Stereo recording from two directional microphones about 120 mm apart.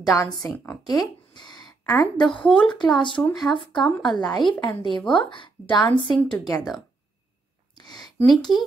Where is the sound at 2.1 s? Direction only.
40° left (ahead or behind).